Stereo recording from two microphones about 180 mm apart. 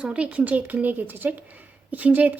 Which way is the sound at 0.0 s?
5° right (ahead or behind).